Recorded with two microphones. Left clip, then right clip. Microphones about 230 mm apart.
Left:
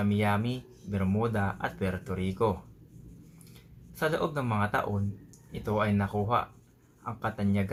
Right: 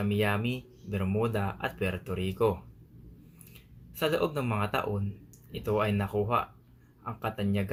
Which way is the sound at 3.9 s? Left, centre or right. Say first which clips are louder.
Right 1 dB; centre.